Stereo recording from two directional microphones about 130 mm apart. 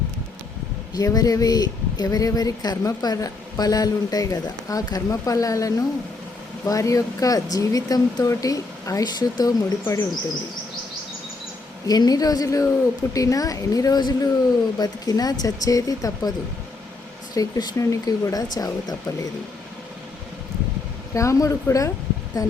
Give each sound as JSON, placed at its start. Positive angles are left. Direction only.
{"t": 0.9, "sound": "speech", "side_deg": 30}
{"t": 11.9, "sound": "speech", "side_deg": 30}
{"t": 17.3, "sound": "speech", "side_deg": 25}
{"t": 21.1, "sound": "speech", "side_deg": 25}